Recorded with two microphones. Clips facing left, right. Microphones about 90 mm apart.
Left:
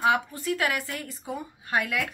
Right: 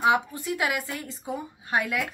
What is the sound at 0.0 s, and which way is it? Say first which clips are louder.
A woman's voice: right 1 dB; 20° right (ahead or behind).